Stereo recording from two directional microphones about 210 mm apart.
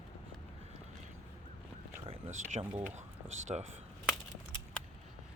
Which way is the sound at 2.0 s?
30° right (ahead or behind).